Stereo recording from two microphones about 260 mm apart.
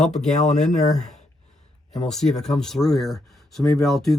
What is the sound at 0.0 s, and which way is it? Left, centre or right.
Speech, centre.